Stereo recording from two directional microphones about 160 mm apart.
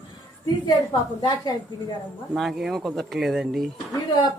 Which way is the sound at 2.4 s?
Centre (ahead or behind).